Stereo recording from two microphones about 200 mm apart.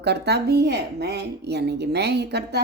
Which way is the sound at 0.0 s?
55° right (ahead or behind).